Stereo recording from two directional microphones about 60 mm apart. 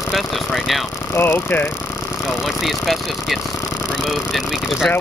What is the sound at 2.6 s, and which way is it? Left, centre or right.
Speech, centre.